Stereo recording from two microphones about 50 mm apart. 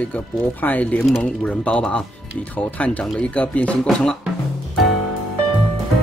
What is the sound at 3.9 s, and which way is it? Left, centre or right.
Speech, centre.